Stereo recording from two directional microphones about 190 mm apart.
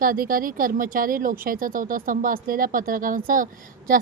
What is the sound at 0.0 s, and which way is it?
A woman's voice, 50° right (ahead or behind).